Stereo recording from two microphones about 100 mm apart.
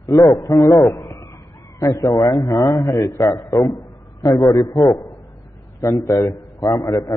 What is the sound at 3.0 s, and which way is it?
A man's voice, 35° left (ahead or behind).